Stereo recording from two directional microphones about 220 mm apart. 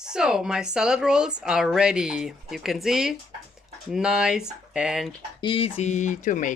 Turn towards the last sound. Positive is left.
turn(degrees=35)  # may be behind; listen again after turning